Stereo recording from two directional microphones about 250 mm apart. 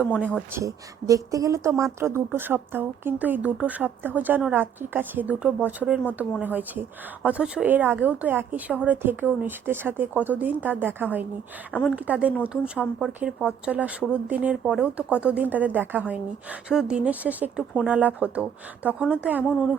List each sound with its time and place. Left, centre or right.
0.5 s speech: centre